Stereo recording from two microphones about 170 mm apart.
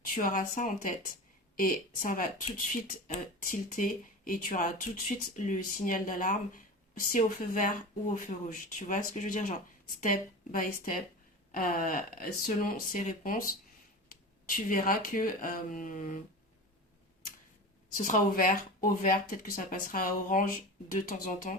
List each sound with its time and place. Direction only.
0.1 s speech: 55° left (ahead or behind)
17.9 s speech: 50° left (ahead or behind)